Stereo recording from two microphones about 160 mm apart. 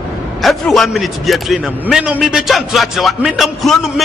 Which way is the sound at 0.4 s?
Centre (ahead or behind).